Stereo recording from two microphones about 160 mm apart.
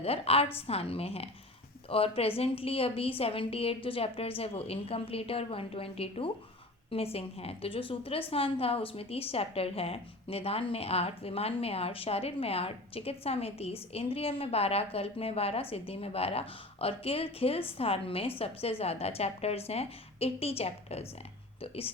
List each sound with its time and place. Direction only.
0.0 s a woman's voice: 35° left (ahead or behind)